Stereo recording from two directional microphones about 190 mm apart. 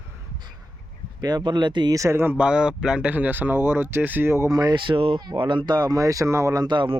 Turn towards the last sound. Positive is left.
turn(degrees=-25)  # may be behind; listen again after turning